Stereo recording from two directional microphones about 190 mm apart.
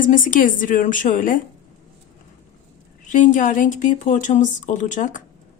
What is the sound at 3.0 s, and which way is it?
Speech, 45° left (ahead or behind).